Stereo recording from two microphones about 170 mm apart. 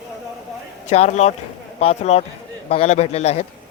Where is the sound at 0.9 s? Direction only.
40° left (ahead or behind).